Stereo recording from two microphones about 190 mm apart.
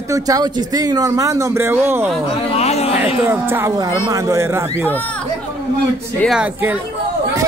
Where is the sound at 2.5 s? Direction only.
35° left (ahead or behind).